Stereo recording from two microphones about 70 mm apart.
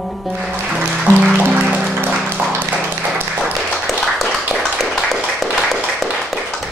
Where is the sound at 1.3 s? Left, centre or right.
Right.